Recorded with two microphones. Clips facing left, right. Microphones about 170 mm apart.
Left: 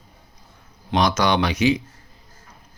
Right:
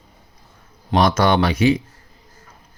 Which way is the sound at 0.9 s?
50° right (ahead or behind).